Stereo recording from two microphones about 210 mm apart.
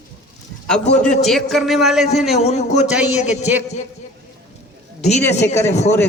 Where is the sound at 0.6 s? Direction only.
5° left (ahead or behind).